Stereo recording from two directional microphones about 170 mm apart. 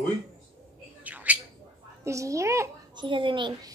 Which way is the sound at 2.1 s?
20° right (ahead or behind).